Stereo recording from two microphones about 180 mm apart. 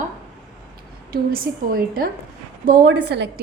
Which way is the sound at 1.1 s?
55° right (ahead or behind).